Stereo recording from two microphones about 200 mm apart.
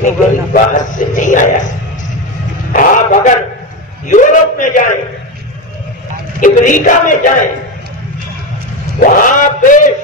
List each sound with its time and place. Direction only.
0.0 s a man's voice: 40° left (ahead or behind)
2.7 s a sound: 40° left (ahead or behind)
4.1 s a man's voice: 40° left (ahead or behind)
6.4 s a man's voice: 40° left (ahead or behind)
9.0 s a man's voice: 40° left (ahead or behind)